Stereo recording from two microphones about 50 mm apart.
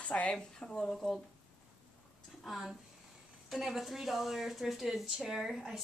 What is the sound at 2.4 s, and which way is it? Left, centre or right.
A woman's voice, centre.